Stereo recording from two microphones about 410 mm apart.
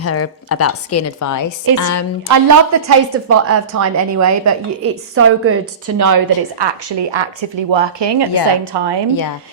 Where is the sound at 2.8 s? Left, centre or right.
Right.